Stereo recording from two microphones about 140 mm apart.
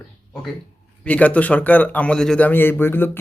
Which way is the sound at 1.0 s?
10° left (ahead or behind).